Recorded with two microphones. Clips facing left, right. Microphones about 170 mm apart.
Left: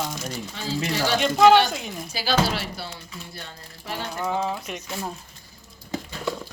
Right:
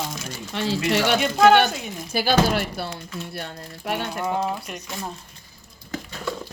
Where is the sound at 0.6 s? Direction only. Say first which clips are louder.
Right 5 dB; 70° right (ahead or behind).